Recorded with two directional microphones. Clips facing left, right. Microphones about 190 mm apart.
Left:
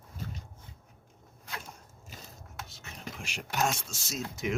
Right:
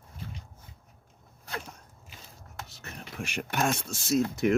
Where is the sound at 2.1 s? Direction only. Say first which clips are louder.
Left 3 dB; 40° left (ahead or behind).